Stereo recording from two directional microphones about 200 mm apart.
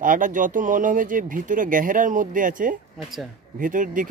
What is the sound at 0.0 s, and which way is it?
Speech, 40° right (ahead or behind).